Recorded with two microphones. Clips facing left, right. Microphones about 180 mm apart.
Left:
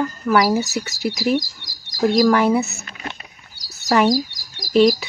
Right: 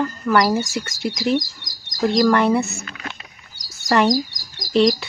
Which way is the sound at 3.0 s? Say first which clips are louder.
Left 2 dB; 30° left (ahead or behind).